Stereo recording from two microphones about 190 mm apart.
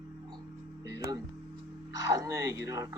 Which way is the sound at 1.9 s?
15° right (ahead or behind).